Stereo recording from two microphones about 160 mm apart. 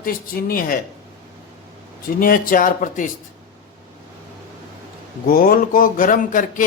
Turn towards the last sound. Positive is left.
turn(degrees=55)  # may be behind; listen again after turning